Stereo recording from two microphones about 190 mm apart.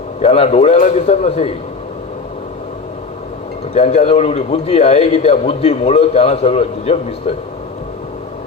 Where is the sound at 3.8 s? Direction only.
35° left (ahead or behind).